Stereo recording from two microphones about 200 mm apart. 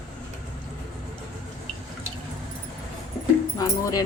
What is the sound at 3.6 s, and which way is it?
Speech, 20° left (ahead or behind).